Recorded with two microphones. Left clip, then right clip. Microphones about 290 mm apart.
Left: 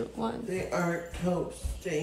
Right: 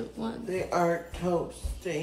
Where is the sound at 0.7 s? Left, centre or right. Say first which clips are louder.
Right 6 dB; centre.